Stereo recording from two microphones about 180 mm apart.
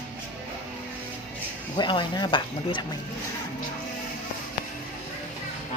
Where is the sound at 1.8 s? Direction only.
25° left (ahead or behind).